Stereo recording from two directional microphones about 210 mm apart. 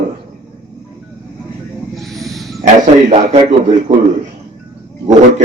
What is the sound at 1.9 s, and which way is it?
Snake, centre (ahead or behind).